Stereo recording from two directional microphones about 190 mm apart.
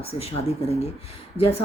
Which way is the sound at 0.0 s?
30° left (ahead or behind).